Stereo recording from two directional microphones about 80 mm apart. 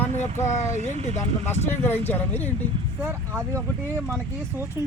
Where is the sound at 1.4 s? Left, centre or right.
Left.